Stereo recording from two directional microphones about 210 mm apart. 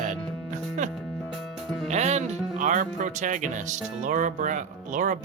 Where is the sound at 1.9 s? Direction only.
30° right (ahead or behind).